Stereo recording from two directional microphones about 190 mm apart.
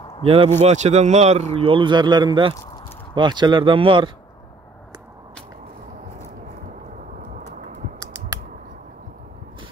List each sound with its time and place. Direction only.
0.2 s a man's voice: 30° right (ahead or behind)